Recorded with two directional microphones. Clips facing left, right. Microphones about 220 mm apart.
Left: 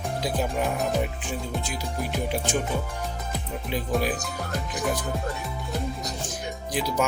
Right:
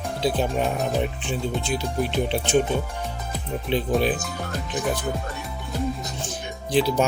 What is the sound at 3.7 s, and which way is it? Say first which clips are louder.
Speech: right 6 dB; 30° right (ahead or behind).